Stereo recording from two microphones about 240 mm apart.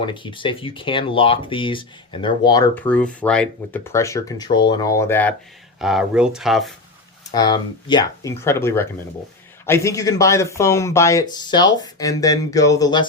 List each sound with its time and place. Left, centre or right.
0.0 s speech: centre
5.8 s speech: centre
7.3 s speech: centre